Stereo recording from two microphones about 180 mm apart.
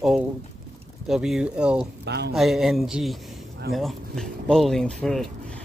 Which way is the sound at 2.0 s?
65° right (ahead or behind).